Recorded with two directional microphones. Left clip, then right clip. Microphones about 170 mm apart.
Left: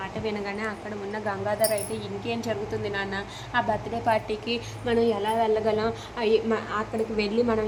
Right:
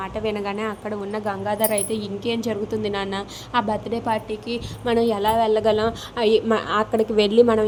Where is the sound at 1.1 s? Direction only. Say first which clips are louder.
Right 2 dB; 15° right (ahead or behind).